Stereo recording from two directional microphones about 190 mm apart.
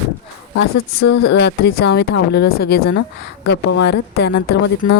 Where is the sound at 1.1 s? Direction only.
65° left (ahead or behind).